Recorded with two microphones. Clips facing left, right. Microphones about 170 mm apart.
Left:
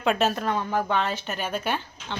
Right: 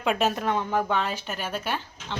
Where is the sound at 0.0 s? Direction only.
10° right (ahead or behind).